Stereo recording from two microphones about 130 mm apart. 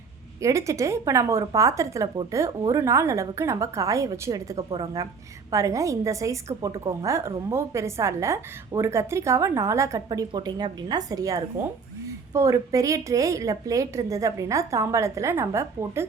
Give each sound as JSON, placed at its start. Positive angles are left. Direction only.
{"t": 0.4, "sound": "a woman's voice", "side_deg": -25}